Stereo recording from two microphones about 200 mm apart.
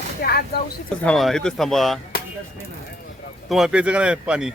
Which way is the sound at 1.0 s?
Centre (ahead or behind).